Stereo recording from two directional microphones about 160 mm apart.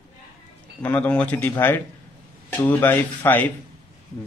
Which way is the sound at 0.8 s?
10° left (ahead or behind).